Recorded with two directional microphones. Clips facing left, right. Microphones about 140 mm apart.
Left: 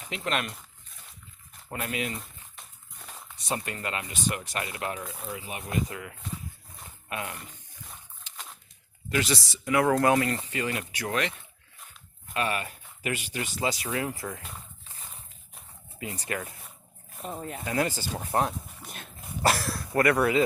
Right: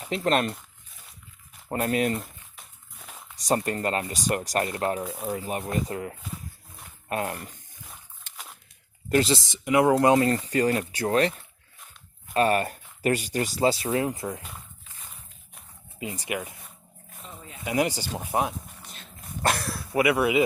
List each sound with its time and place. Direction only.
0.0 s speech: 35° right (ahead or behind)
1.7 s speech: 40° right (ahead or behind)
3.1 s a sound: 5° right (ahead or behind)
3.3 s speech: 40° right (ahead or behind)
9.2 s speech: 25° right (ahead or behind)
16.0 s speech: 15° right (ahead or behind)
17.2 s speech: 50° left (ahead or behind)
17.7 s speech: 15° right (ahead or behind)
19.4 s speech: centre (ahead or behind)